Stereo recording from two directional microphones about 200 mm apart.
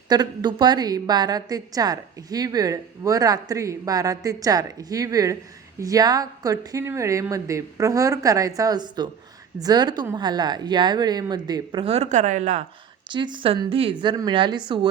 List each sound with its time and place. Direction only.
0.1 s a woman's voice: 20° right (ahead or behind)
13.1 s a woman's voice: 25° right (ahead or behind)